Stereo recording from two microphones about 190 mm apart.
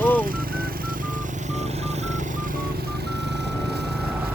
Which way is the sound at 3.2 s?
65° right (ahead or behind).